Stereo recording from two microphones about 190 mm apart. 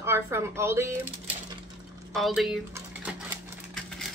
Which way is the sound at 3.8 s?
Centre (ahead or behind).